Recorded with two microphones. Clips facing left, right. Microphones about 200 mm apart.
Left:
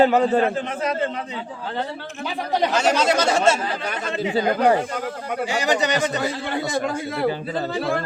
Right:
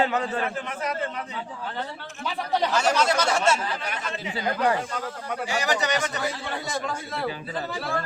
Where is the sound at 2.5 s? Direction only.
20° left (ahead or behind).